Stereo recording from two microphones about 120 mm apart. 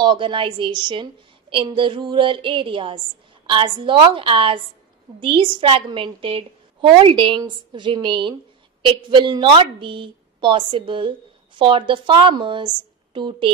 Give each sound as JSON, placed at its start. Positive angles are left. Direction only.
{"t": 0.0, "sound": "a woman's voice", "side_deg": -45}